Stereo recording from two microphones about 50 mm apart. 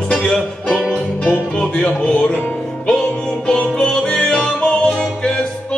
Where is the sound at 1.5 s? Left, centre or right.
Left.